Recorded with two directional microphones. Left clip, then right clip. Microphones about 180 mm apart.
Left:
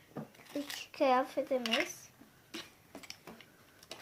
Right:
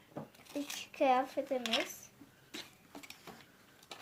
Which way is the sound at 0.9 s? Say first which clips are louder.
Left 1 dB; 15° left (ahead or behind).